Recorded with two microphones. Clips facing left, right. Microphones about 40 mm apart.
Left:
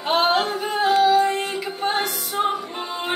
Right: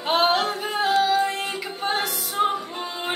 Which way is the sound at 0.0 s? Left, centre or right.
Centre.